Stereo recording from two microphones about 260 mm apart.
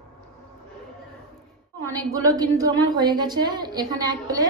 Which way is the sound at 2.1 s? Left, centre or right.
Centre.